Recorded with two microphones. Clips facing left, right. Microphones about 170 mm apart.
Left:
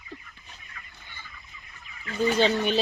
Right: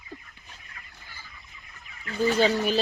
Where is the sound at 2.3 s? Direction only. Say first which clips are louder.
Even; 5° right (ahead or behind).